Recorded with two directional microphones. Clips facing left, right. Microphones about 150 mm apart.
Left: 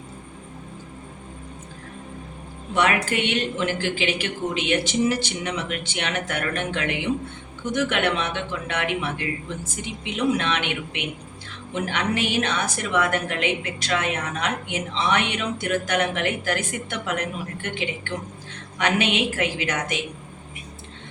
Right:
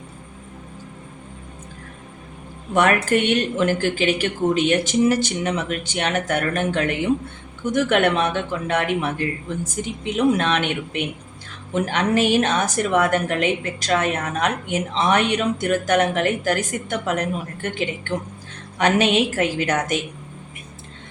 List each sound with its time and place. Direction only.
2.7 s a woman's voice: 50° right (ahead or behind)